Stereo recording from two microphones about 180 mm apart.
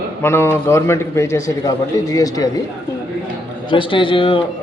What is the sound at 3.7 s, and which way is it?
Speech, 30° left (ahead or behind).